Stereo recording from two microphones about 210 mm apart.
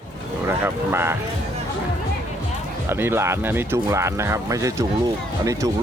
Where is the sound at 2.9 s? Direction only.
10° right (ahead or behind).